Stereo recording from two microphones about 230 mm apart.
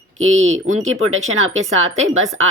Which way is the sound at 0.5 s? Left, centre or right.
Right.